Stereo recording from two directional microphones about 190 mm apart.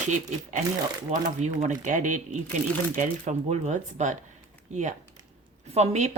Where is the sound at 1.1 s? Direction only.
40° right (ahead or behind).